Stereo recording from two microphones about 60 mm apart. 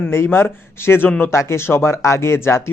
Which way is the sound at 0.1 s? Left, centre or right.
Left.